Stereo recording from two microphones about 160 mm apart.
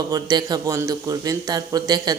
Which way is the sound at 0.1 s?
25° right (ahead or behind).